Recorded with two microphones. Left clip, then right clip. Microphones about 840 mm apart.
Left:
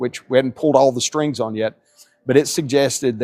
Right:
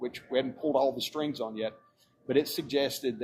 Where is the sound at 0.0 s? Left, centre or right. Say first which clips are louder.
Left 13 dB; left.